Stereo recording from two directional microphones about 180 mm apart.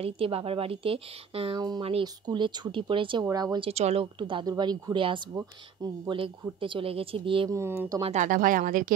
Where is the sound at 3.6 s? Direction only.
35° right (ahead or behind).